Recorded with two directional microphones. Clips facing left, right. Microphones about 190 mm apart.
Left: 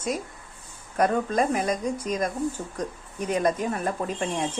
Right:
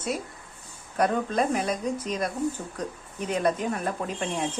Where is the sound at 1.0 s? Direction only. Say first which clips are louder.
Left 2 dB; 10° left (ahead or behind).